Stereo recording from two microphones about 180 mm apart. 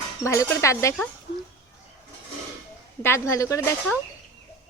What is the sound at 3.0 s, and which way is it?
Speech, 15° left (ahead or behind).